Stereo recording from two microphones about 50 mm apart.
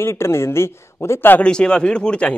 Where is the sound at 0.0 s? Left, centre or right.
Left.